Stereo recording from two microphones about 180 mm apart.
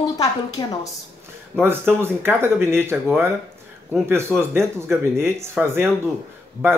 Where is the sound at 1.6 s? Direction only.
15° right (ahead or behind).